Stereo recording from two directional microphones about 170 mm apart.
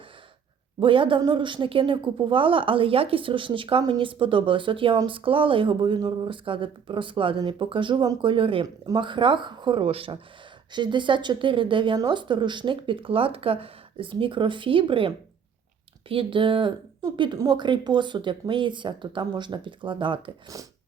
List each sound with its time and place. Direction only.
0.8 s speech: 30° right (ahead or behind)